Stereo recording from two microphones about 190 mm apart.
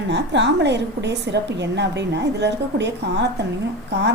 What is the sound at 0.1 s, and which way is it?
A woman's voice, 65° right (ahead or behind).